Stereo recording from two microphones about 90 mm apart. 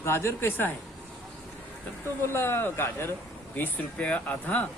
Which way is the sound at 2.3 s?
25° left (ahead or behind).